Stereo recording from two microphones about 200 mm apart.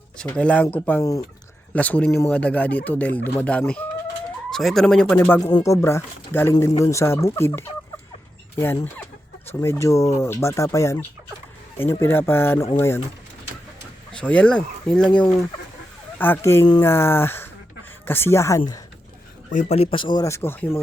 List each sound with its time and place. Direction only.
0.2 s speech: 5° left (ahead or behind)
14.2 s speech: 5° left (ahead or behind)
19.5 s speech: 30° left (ahead or behind); by 20.7 s 10° left (ahead or behind)